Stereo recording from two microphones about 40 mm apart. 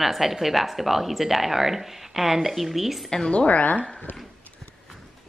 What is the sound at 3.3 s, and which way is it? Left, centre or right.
Speech, left.